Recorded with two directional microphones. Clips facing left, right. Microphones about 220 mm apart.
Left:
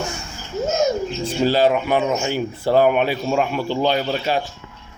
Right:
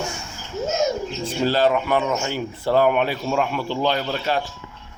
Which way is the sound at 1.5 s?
15° left (ahead or behind).